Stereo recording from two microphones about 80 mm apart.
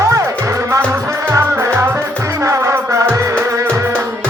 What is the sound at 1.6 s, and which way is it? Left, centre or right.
Music, right.